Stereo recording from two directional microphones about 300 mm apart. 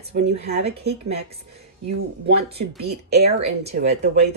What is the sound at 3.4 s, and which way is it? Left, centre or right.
Speech, right.